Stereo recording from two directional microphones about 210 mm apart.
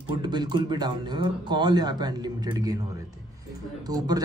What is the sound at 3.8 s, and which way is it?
Speech, 20° right (ahead or behind).